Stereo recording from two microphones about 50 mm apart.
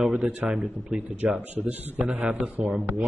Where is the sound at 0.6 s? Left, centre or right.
Right.